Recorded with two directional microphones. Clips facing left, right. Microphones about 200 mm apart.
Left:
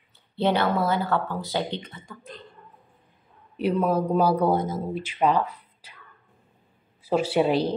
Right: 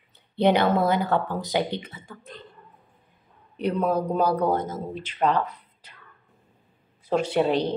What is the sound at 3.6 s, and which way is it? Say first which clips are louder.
Speech: left 1 dB; 5° left (ahead or behind).